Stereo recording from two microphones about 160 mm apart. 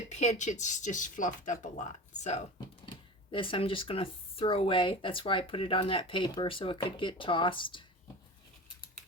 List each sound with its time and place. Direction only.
0.1 s speech: 45° left (ahead or behind)
3.3 s speech: 35° left (ahead or behind)